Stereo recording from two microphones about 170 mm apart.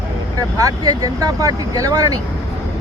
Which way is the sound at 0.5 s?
20° right (ahead or behind).